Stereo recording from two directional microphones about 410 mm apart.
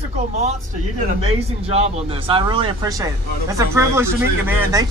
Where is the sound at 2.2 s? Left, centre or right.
Centre.